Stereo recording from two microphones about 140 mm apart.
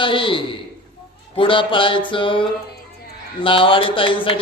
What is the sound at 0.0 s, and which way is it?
A man's voice, 35° left (ahead or behind).